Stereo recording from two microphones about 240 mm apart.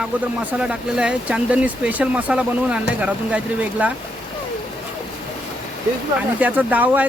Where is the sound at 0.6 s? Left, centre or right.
Centre.